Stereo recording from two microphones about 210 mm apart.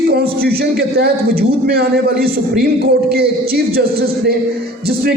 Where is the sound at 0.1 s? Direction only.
45° right (ahead or behind).